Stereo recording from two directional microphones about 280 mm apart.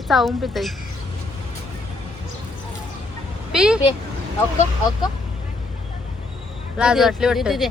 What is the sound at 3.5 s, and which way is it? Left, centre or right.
Speech, centre.